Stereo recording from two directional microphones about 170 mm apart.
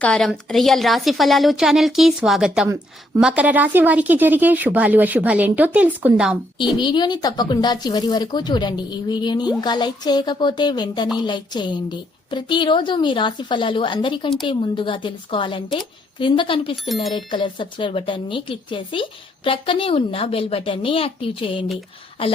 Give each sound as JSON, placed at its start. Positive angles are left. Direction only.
{"t": 0.0, "sound": "a woman's voice", "side_deg": 5}
{"t": 6.7, "sound": "a woman's voice", "side_deg": 25}
{"t": 16.9, "sound": "a woman's voice", "side_deg": 0}
{"t": 17.2, "sound": "a woman's voice", "side_deg": 30}